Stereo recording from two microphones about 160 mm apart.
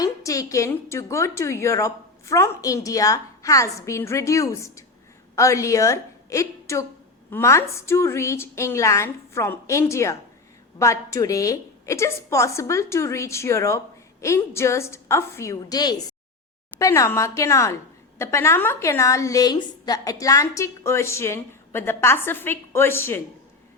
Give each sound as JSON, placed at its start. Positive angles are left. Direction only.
{"t": 0.0, "sound": "a woman's voice", "side_deg": 20}